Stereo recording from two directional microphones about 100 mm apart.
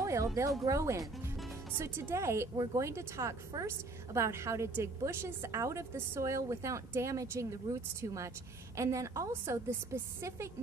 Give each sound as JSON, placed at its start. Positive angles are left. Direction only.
{"t": 0.0, "sound": "a sound", "side_deg": -30}
{"t": 0.7, "sound": "a woman's voice", "side_deg": -30}
{"t": 2.5, "sound": "a woman's voice", "side_deg": -40}